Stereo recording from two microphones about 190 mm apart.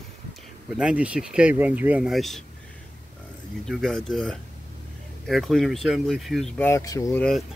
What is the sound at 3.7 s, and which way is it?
Speech, centre (ahead or behind).